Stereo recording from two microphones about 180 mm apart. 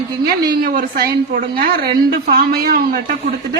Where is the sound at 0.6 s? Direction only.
55° right (ahead or behind).